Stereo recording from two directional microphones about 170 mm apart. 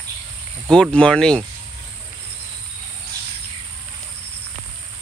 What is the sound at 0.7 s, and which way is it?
Speech, 5° left (ahead or behind).